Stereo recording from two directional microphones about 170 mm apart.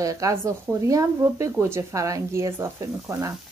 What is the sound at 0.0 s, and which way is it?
Speech, 20° right (ahead or behind).